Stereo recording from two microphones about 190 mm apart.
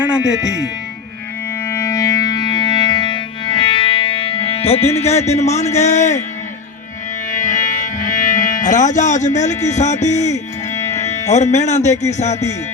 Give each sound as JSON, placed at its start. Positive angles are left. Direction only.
{"t": 1.6, "sound": "music", "side_deg": 15}
{"t": 7.3, "sound": "music", "side_deg": 40}
{"t": 10.8, "sound": "music", "side_deg": 15}
{"t": 11.3, "sound": "speech", "side_deg": 35}